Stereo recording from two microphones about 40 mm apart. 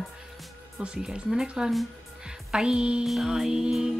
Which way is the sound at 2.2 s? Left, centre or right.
Centre.